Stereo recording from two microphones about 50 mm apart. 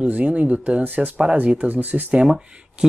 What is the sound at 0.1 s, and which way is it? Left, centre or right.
Speech, right.